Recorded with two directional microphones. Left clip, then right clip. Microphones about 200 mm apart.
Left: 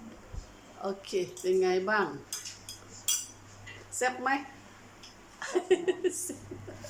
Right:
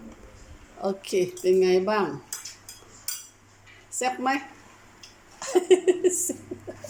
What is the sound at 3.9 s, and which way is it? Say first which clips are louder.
Speech: right 4 dB; 15° right (ahead or behind).